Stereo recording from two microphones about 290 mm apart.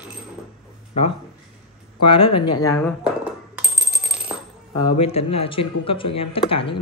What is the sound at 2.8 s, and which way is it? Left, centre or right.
Coin, centre.